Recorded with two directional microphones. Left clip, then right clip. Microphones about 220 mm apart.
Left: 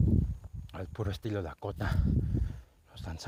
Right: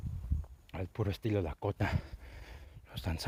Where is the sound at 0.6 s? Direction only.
15° right (ahead or behind).